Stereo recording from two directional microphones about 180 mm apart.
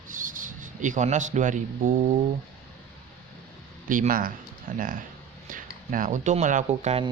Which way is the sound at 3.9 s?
50° right (ahead or behind).